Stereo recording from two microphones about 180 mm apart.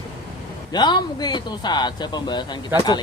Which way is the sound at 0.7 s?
25° left (ahead or behind).